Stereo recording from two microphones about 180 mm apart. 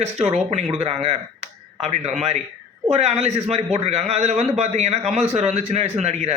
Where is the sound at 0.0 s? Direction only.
40° right (ahead or behind).